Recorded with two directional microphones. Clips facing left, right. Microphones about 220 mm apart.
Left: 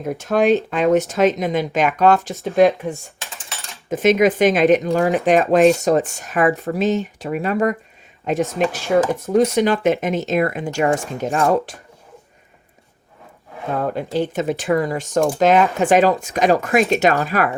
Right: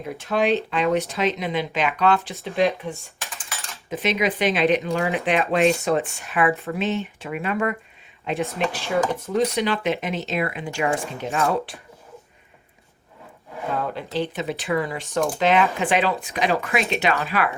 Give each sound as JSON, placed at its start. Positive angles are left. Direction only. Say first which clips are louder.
{"t": 0.0, "sound": "speech", "louder": "left 5 dB", "side_deg": 45}
{"t": 13.7, "sound": "speech", "louder": "left 6 dB", "side_deg": 45}